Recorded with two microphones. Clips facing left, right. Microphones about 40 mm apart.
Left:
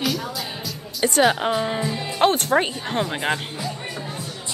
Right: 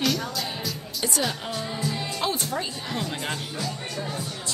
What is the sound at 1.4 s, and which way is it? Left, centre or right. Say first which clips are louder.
Speech: left 10 dB; left.